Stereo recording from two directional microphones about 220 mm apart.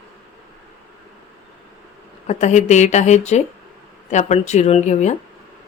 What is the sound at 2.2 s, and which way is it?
Speech, 30° left (ahead or behind).